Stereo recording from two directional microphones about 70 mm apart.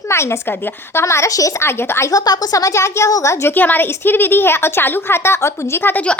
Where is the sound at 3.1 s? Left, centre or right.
Left.